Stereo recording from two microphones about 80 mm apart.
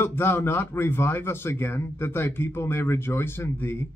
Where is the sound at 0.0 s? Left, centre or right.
Left.